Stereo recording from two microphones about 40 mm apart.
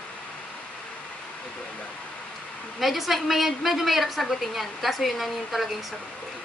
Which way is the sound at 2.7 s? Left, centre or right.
Centre.